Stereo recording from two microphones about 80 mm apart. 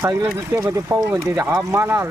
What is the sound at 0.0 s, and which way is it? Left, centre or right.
Speech, right.